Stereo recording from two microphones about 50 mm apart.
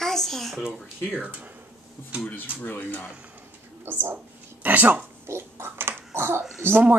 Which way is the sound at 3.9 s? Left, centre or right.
Right.